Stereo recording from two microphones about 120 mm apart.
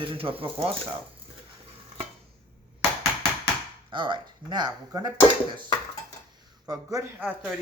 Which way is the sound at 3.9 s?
40° right (ahead or behind).